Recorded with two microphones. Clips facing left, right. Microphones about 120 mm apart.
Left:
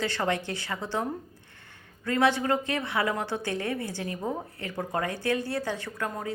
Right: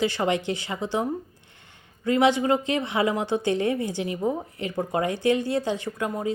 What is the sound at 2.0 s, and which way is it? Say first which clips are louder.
A woman's voice: right 4 dB; 15° right (ahead or behind).